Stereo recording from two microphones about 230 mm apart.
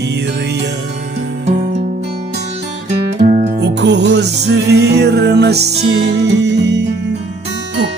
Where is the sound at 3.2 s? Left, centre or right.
Right.